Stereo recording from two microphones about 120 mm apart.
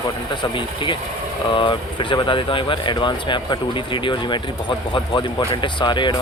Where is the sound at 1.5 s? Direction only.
45° left (ahead or behind).